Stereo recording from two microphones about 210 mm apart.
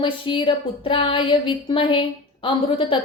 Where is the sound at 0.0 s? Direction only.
25° left (ahead or behind).